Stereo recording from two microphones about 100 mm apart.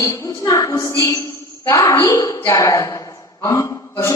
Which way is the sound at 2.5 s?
30° left (ahead or behind).